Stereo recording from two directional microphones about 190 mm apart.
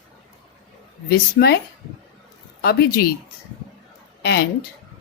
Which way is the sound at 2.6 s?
55° left (ahead or behind).